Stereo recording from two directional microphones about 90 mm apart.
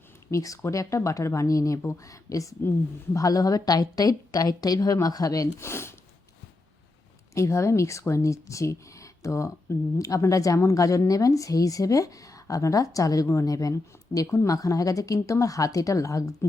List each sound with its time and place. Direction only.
0.3 s speech: 35° left (ahead or behind)
7.3 s speech: 35° left (ahead or behind)